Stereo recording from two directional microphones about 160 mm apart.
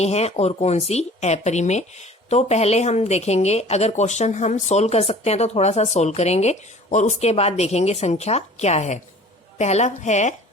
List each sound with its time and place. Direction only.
0.0 s speech: 40° left (ahead or behind)